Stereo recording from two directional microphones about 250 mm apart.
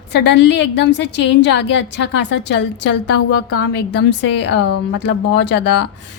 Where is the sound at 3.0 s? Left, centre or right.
Left.